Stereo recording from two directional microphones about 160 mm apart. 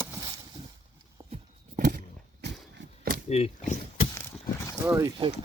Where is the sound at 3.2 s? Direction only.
40° left (ahead or behind).